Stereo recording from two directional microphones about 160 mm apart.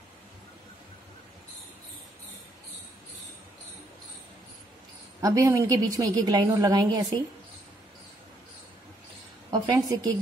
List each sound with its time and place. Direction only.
5.2 s a woman's voice: 20° right (ahead or behind)
9.5 s a woman's voice: 20° right (ahead or behind)